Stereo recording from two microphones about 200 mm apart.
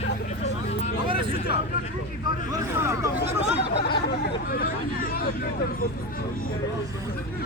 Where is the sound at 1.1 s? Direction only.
25° right (ahead or behind).